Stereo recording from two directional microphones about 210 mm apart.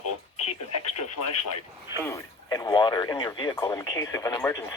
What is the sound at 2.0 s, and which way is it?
Speech, 15° left (ahead or behind).